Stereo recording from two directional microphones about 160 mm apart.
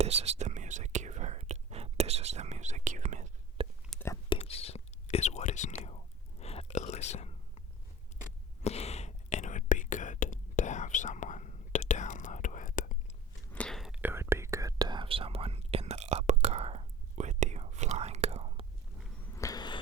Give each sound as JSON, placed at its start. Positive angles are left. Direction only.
{"t": 0.0, "sound": "whispering", "side_deg": -40}
{"t": 3.9, "sound": "whispering", "side_deg": 0}
{"t": 4.3, "sound": "whispering", "side_deg": 35}
{"t": 13.5, "sound": "whispering", "side_deg": 5}
{"t": 14.0, "sound": "whispering", "side_deg": -15}
{"t": 19.2, "sound": "a sound", "side_deg": 20}